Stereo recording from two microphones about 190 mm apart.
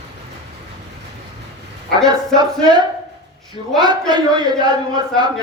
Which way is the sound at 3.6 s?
30° left (ahead or behind).